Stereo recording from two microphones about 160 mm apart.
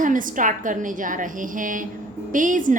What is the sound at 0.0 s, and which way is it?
Speech, 55° right (ahead or behind).